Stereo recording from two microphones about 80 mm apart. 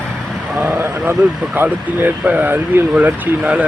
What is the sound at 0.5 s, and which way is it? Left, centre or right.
Speech, right.